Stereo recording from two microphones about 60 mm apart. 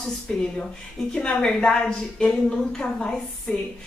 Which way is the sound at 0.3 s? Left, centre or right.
Centre.